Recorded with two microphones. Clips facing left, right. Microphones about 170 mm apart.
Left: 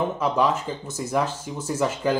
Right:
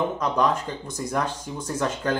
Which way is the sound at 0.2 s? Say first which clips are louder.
Left 1 dB; 5° left (ahead or behind).